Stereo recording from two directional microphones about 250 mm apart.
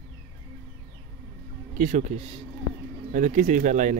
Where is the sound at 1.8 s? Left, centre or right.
Right.